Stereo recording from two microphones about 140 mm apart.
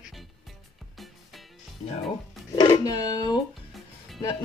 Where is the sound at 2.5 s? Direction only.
30° left (ahead or behind).